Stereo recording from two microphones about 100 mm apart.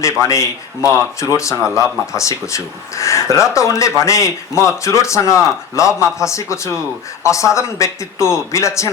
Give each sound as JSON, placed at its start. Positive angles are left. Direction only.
{"t": 0.0, "sound": "speech", "side_deg": 30}